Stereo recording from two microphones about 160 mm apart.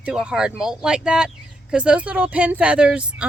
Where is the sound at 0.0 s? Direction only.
5° right (ahead or behind).